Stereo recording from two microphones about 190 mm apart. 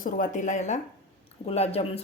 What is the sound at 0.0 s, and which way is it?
Speech, 45° left (ahead or behind).